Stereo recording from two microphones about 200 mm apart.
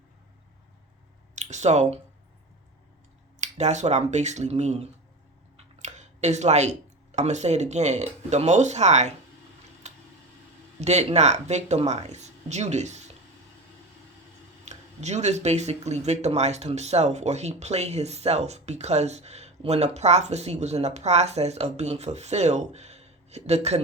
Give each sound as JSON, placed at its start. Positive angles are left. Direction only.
{"t": 1.4, "sound": "speech", "side_deg": -35}
{"t": 3.4, "sound": "speech", "side_deg": -35}
{"t": 9.8, "sound": "a sound", "side_deg": -35}
{"t": 10.8, "sound": "speech", "side_deg": -35}
{"t": 14.6, "sound": "speech", "side_deg": -35}